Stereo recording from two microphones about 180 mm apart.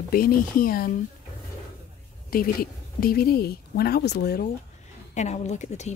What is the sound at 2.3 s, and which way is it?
Speech, 55° left (ahead or behind).